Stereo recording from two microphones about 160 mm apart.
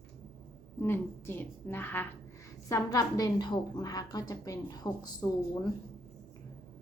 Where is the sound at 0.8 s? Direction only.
15° left (ahead or behind).